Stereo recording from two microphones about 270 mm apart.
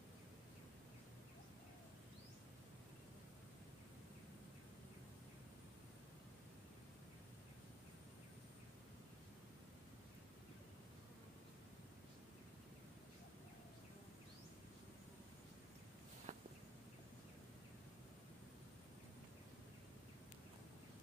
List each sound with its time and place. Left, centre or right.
16.3 s walk: right